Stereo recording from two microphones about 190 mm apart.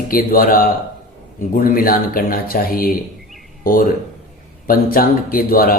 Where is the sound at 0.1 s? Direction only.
50° left (ahead or behind).